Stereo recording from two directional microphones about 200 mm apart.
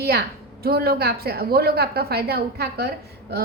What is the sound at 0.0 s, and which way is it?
Speech, 50° right (ahead or behind).